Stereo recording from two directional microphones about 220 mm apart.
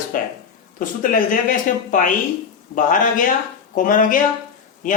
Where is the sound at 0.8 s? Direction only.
35° left (ahead or behind).